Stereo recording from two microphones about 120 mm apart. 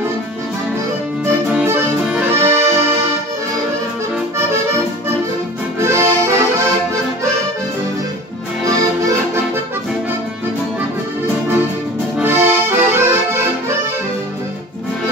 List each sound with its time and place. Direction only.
2.0 s accordion: 10° right (ahead or behind)
2.3 s accordion: 20° right (ahead or behind)
4.4 s accordion: 20° right (ahead or behind)
12.2 s accordion: 20° right (ahead or behind)